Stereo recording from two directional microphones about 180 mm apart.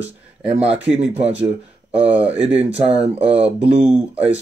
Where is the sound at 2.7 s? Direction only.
35° right (ahead or behind).